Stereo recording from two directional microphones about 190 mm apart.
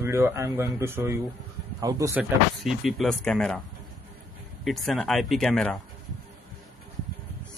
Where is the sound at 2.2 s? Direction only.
Centre (ahead or behind).